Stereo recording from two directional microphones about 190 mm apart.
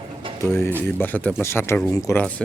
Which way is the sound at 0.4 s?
10° left (ahead or behind).